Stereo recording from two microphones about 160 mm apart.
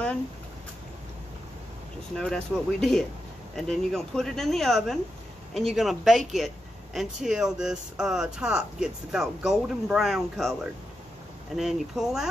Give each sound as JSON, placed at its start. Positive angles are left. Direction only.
{"t": 2.1, "sound": "speech", "side_deg": 5}